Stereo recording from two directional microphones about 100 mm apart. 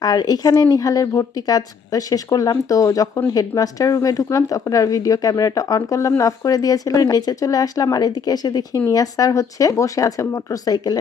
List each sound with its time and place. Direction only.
0.0 s speech: 40° left (ahead or behind)